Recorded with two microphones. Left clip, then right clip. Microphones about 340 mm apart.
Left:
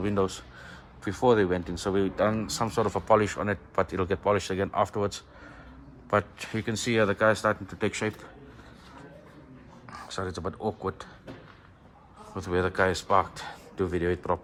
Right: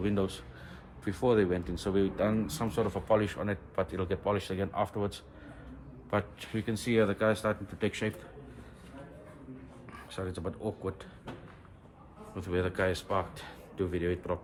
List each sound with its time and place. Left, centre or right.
0.0 s speech: centre
9.9 s speech: centre
12.3 s speech: centre